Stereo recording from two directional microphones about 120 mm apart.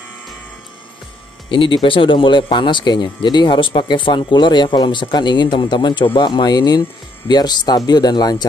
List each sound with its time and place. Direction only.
1.5 s speech: 45° left (ahead or behind)